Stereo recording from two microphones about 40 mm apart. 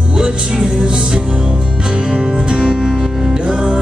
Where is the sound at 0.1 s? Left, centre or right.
Right.